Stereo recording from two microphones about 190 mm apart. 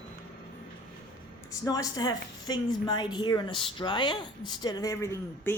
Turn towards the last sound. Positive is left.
turn(degrees=15)  # may be behind; listen again after turning